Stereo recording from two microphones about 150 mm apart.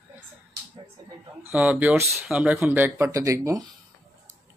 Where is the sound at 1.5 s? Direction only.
10° right (ahead or behind).